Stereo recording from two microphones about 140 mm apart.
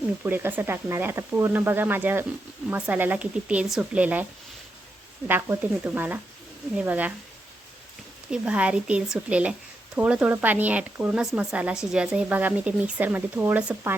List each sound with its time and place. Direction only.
0.2 s speech: 15° right (ahead or behind)
5.3 s speech: 15° right (ahead or behind)
8.3 s speech: 10° right (ahead or behind)